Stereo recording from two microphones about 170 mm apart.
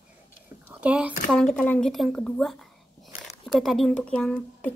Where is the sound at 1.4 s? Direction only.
5° left (ahead or behind).